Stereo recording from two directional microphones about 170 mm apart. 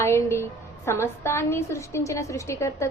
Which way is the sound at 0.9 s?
15° left (ahead or behind).